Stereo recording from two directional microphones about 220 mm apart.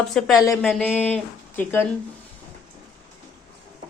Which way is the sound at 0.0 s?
Centre (ahead or behind).